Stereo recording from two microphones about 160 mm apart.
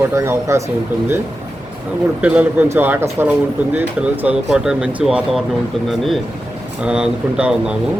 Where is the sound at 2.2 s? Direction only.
10° right (ahead or behind).